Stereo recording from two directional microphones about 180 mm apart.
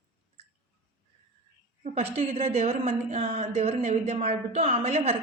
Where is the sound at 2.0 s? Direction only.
35° right (ahead or behind).